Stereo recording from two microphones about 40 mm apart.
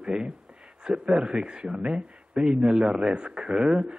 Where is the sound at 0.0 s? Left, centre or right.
Right.